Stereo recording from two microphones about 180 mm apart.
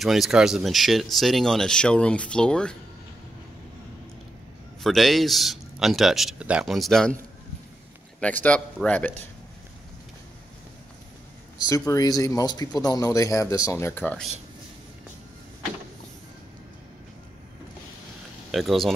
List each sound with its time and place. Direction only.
0.0 s speech: centre (ahead or behind)
4.8 s speech: centre (ahead or behind)
8.2 s speech: 10° left (ahead or behind)
11.6 s speech: 20° left (ahead or behind)
18.5 s speech: centre (ahead or behind)